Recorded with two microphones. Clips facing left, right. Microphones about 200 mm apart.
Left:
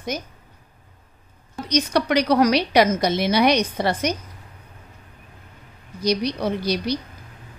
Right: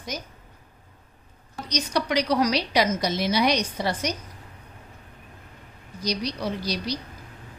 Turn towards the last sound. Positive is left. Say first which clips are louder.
# left 6 dB
turn(degrees=55)  # may be behind; listen again after turning